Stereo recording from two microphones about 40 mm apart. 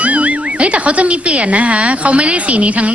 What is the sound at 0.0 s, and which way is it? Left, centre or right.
Speech, right.